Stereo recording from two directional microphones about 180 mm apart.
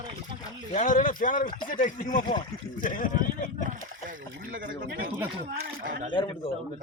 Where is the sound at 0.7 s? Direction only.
45° left (ahead or behind).